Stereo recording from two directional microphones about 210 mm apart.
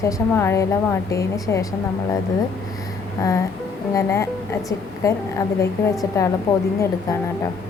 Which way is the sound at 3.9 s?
15° left (ahead or behind).